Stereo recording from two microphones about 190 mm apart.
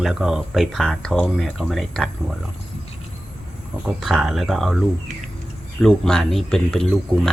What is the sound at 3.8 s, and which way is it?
Speech, centre (ahead or behind).